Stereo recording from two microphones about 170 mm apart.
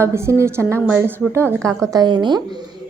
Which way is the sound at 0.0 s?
15° right (ahead or behind).